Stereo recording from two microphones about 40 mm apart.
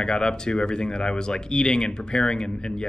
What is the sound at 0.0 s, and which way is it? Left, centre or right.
Speech, left.